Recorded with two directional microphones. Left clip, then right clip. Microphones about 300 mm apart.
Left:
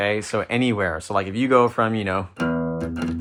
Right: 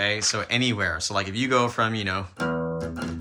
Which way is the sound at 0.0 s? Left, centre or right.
Centre.